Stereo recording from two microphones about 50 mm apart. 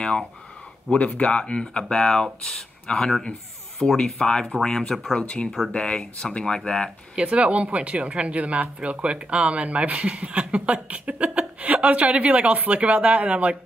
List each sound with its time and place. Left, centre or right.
0.9 s speech: left
7.2 s a woman's voice: right